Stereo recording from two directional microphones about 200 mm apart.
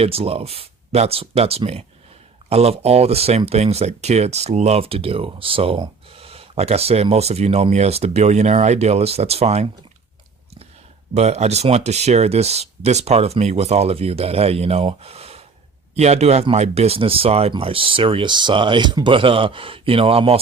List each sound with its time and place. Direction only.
0.0 s speech: 30° right (ahead or behind)
11.1 s speech: 35° right (ahead or behind)